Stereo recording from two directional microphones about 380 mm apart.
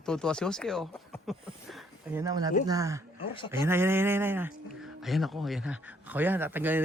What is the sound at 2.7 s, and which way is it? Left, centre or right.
A man's voice, centre.